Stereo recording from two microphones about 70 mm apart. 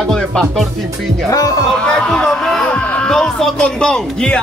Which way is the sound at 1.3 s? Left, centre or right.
Left.